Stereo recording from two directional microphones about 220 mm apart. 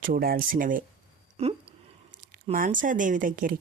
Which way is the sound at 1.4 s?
30° right (ahead or behind).